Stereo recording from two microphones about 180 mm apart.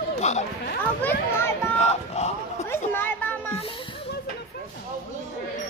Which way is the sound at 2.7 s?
10° left (ahead or behind).